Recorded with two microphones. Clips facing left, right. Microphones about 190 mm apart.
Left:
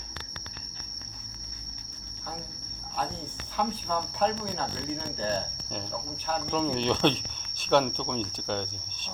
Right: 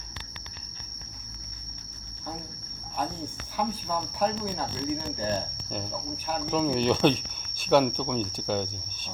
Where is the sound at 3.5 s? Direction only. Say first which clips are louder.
Even; 10° right (ahead or behind).